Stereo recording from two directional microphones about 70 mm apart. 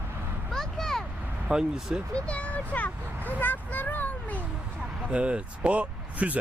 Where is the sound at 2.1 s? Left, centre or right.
Centre.